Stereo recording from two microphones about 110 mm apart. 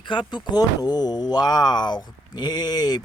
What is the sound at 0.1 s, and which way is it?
Speech, 45° left (ahead or behind).